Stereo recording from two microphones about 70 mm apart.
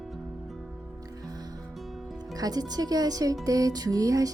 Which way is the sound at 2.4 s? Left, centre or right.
Right.